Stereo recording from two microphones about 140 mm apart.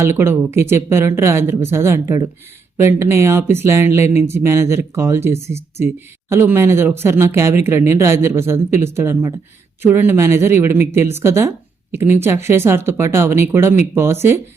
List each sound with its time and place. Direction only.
0.0 s speech: 15° right (ahead or behind)